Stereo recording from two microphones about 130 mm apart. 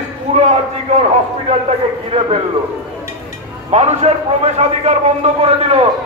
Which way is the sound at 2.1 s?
40° right (ahead or behind).